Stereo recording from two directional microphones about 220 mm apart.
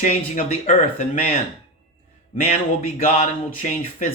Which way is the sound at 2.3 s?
35° left (ahead or behind).